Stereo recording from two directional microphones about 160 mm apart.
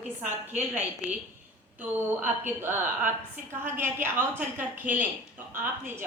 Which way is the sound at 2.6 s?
10° right (ahead or behind).